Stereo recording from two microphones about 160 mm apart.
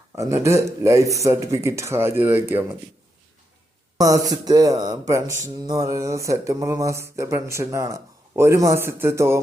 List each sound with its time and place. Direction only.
0.2 s speech: 20° right (ahead or behind)
3.9 s speech: 25° right (ahead or behind)